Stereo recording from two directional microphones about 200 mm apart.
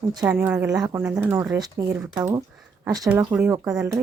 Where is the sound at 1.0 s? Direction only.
5° right (ahead or behind).